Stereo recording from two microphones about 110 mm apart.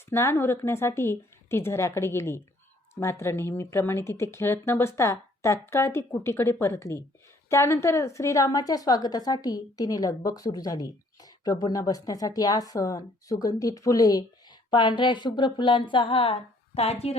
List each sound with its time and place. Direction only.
0.1 s a woman's voice: 25° left (ahead or behind)
14.7 s speech: 45° left (ahead or behind); by 17.2 s 70° left (ahead or behind)